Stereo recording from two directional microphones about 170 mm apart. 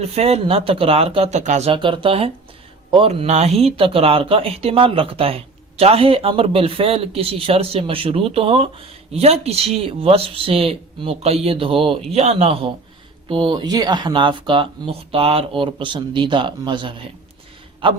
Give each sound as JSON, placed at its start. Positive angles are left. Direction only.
{"t": 0.1, "sound": "speech", "side_deg": -35}
{"t": 1.7, "sound": "speech", "side_deg": -30}